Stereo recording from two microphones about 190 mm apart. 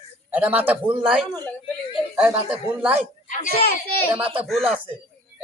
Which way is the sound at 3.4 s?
45° left (ahead or behind).